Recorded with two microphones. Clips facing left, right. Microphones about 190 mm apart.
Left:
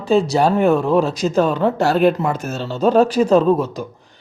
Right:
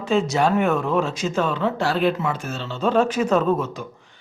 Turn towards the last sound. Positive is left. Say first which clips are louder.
# left 5 dB
turn(degrees=35)  # may be behind; listen again after turning